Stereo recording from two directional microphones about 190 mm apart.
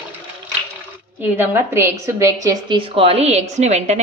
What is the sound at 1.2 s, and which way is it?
A woman's voice, 15° right (ahead or behind).